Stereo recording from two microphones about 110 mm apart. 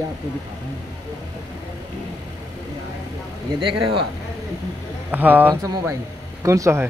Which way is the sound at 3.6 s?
50° right (ahead or behind).